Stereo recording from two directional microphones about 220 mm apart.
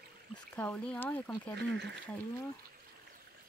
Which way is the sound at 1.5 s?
55° right (ahead or behind).